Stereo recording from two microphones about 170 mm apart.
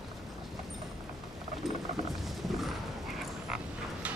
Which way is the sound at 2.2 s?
Centre (ahead or behind).